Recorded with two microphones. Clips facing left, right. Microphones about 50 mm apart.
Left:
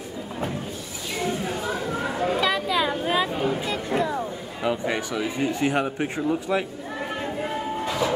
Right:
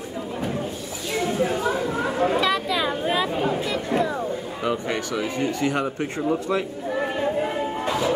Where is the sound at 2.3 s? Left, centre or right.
Centre.